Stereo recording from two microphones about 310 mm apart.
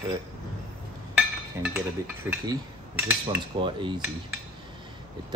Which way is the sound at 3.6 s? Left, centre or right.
Centre.